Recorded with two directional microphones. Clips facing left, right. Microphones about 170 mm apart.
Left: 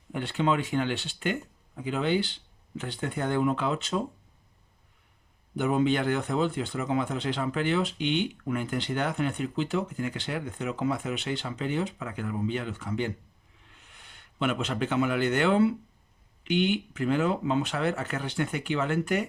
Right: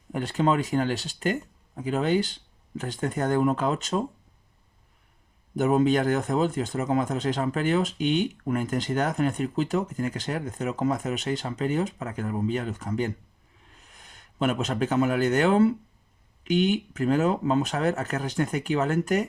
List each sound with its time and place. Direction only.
0.1 s speech: 40° right (ahead or behind)
5.5 s speech: 45° right (ahead or behind)